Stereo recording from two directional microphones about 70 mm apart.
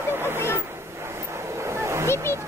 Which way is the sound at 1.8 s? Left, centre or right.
Right.